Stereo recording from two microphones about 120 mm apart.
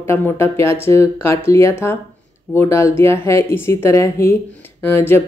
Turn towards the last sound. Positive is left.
turn(degrees=20)  # may be behind; listen again after turning